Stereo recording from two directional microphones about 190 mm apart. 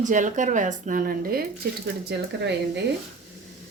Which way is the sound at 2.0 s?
65° right (ahead or behind).